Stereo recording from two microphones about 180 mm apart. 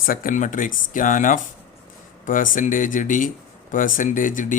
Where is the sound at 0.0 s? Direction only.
50° left (ahead or behind).